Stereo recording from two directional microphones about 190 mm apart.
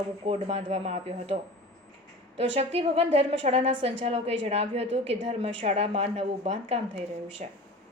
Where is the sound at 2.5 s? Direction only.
30° right (ahead or behind).